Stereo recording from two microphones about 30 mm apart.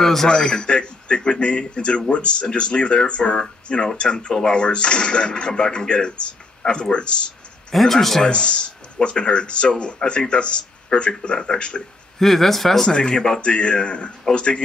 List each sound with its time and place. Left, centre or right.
0.0 s a sound: centre
0.3 s speech: left
7.7 s speech: centre
8.3 s speech: left
12.2 s speech: centre
12.9 s speech: left